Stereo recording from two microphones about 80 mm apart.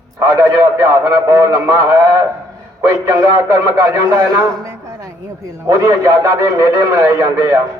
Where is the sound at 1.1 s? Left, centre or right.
Right.